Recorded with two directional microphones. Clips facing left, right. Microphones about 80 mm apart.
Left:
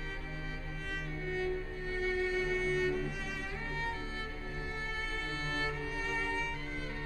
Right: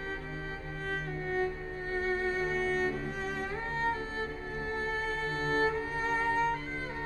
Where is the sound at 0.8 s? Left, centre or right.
Right.